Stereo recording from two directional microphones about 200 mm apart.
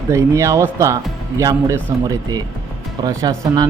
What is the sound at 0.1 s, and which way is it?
Speech, 15° right (ahead or behind).